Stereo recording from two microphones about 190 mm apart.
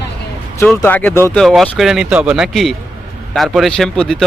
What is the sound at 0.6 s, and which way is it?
Speech, 10° left (ahead or behind).